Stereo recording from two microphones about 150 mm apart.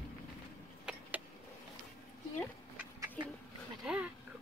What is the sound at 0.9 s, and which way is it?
Vehicle, 5° right (ahead or behind).